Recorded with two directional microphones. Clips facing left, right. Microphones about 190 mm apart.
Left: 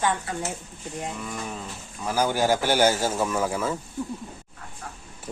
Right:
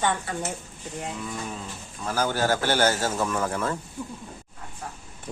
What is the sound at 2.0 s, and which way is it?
Speech, 10° left (ahead or behind).